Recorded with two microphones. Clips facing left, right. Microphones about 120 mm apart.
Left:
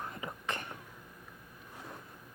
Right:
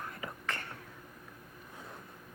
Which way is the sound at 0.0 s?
20° left (ahead or behind).